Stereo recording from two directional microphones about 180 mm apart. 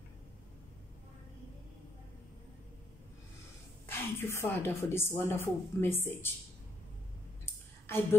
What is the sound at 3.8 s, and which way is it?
A woman's voice, 15° left (ahead or behind).